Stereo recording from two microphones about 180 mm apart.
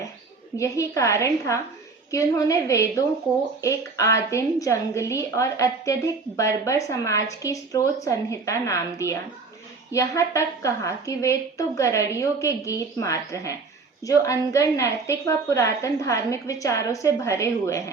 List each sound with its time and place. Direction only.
0.5 s a woman's voice: 15° left (ahead or behind)